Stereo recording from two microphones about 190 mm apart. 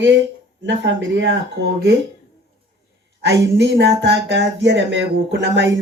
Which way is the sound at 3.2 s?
70° right (ahead or behind).